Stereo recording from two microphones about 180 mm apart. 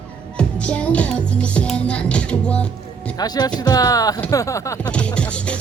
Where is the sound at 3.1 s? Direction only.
20° left (ahead or behind).